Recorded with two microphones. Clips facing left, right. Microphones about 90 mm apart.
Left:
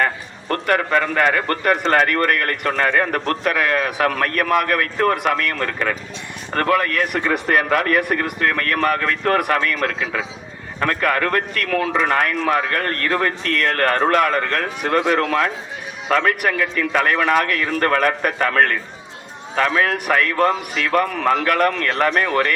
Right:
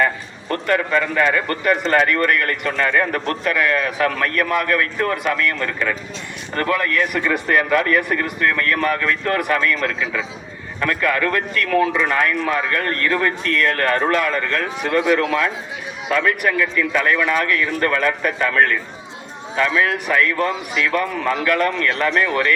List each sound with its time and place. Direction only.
0.4 s a man's voice: 50° left (ahead or behind)